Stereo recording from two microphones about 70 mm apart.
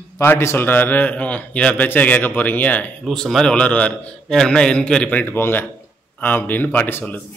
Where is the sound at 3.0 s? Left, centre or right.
Centre; by 7.0 s left.